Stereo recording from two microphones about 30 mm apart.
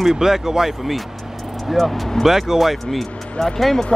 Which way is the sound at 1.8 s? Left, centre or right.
Centre.